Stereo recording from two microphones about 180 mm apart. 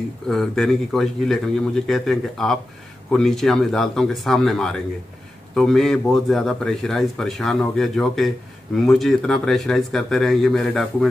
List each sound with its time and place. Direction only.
0.3 s a man's voice: centre (ahead or behind)